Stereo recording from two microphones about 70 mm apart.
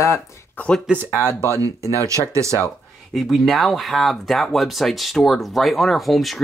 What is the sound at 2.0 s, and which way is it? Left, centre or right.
Speech, right.